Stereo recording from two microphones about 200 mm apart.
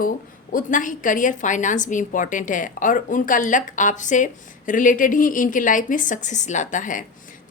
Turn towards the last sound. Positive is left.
turn(degrees=40)  # may be behind; listen again after turning